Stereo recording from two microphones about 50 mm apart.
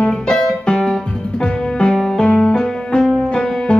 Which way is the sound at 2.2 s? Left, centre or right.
Centre.